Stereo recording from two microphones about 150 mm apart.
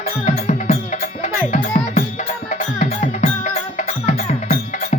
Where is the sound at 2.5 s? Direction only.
55° left (ahead or behind).